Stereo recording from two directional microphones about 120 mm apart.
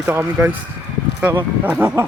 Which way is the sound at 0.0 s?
20° right (ahead or behind).